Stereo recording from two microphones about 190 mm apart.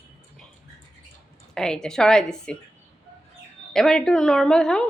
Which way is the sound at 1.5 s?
5° left (ahead or behind).